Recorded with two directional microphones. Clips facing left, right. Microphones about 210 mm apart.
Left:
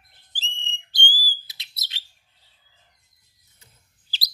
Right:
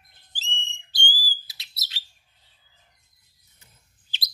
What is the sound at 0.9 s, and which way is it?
Bird, 20° left (ahead or behind).